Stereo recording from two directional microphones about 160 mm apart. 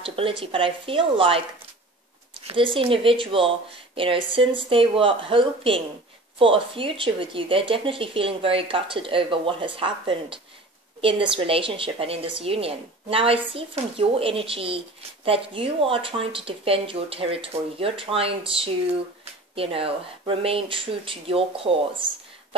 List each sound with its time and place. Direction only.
0.0 s speech: 35° right (ahead or behind)
2.4 s speech: 35° right (ahead or behind)